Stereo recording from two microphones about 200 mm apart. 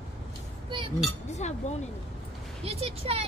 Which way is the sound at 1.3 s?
35° left (ahead or behind).